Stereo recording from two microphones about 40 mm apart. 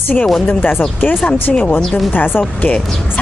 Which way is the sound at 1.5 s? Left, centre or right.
Centre.